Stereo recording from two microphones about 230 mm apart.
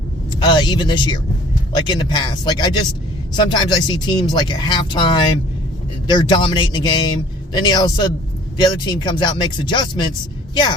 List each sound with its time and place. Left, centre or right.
0.3 s a man's voice: centre